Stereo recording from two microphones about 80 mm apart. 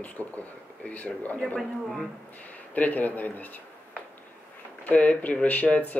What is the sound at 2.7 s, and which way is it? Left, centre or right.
Speech, left.